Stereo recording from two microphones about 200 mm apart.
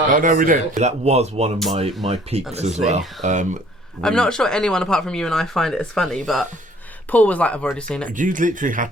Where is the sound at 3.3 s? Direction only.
35° right (ahead or behind).